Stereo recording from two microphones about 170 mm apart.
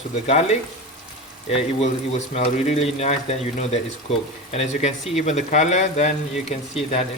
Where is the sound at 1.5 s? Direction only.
40° left (ahead or behind).